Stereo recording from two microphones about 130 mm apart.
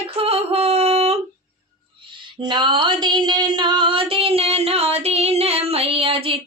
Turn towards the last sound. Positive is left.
turn(degrees=-45)  # may be behind; listen again after turning